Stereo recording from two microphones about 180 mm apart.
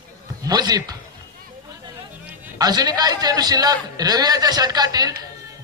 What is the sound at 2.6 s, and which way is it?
A man's voice, 20° right (ahead or behind).